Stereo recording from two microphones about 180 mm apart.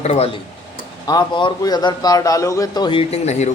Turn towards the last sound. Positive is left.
turn(degrees=40)  # may be behind; listen again after turning